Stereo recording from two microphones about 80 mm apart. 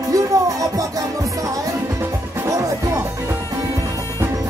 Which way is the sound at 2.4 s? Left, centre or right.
Right.